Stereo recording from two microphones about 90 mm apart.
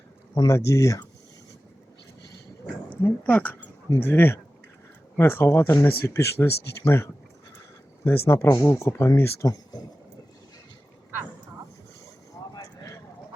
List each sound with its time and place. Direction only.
0.4 s speech: 35° left (ahead or behind)
3.0 s speech: 20° left (ahead or behind); by 9.8 s 40° left (ahead or behind)
12.3 s vehicle: 40° left (ahead or behind)